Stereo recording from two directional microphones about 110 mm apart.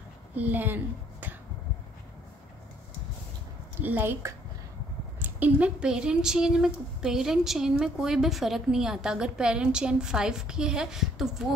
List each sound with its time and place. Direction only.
0.4 s a woman's voice: 15° right (ahead or behind)
3.8 s a woman's voice: 20° right (ahead or behind)